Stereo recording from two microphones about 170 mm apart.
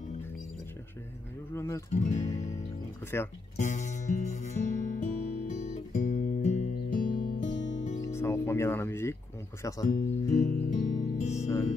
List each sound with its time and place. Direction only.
1.5 s speech: 15° left (ahead or behind)
1.9 s speech: 45° left (ahead or behind)
2.3 s music: 45° left (ahead or behind)
8.1 s music: 15° left (ahead or behind)
9.6 s speech: 20° left (ahead or behind)
9.8 s speech: 50° left (ahead or behind)
10.4 s music: 55° left (ahead or behind)